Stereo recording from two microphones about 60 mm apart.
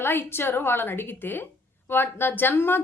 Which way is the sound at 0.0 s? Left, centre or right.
Left.